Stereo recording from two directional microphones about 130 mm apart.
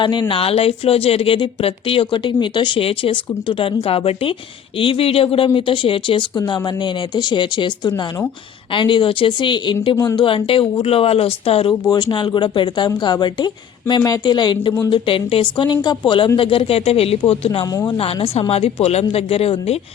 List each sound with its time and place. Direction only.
0.0 s a woman's voice: 35° left (ahead or behind)
11.7 s a woman's voice: 35° left (ahead or behind); by 19.8 s 50° left (ahead or behind)